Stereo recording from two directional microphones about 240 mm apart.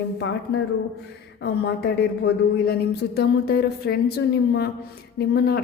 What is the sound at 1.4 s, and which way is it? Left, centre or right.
Speech, left.